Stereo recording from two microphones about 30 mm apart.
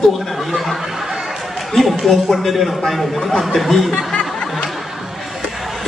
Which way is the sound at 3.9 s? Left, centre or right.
Left.